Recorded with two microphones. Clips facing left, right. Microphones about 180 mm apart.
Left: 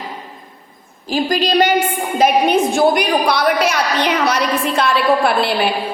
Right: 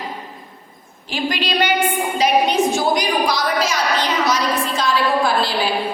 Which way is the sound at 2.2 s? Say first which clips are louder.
Left 3 dB; 50° left (ahead or behind).